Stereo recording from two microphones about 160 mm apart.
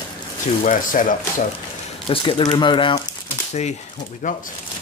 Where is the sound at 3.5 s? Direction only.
45° left (ahead or behind).